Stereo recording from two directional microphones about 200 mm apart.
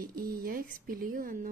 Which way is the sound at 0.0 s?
45° right (ahead or behind).